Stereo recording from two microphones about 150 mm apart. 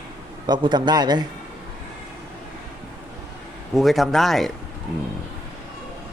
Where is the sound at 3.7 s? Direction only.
Centre (ahead or behind).